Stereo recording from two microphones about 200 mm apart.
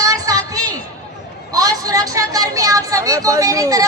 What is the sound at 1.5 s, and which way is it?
A woman's voice, 15° right (ahead or behind).